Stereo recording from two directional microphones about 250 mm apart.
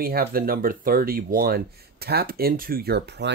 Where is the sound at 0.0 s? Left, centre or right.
Right.